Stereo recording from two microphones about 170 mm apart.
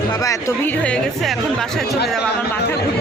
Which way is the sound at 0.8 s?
5° left (ahead or behind).